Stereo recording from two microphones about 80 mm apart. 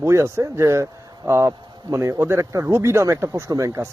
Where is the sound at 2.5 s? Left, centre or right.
Right.